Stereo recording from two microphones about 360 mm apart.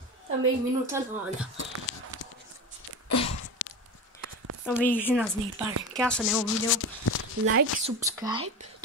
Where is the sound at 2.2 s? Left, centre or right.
Left.